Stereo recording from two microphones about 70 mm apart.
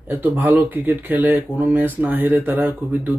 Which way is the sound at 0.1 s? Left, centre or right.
Right.